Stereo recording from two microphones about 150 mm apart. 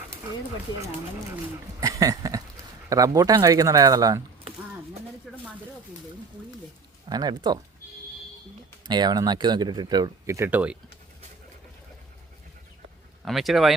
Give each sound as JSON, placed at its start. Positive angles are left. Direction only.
{"t": 1.8, "sound": "a sound", "side_deg": -20}
{"t": 2.9, "sound": "speech", "side_deg": -25}
{"t": 5.3, "sound": "a sound", "side_deg": 0}
{"t": 7.1, "sound": "speech", "side_deg": -25}
{"t": 8.9, "sound": "speech", "side_deg": -30}
{"t": 13.2, "sound": "speech", "side_deg": 0}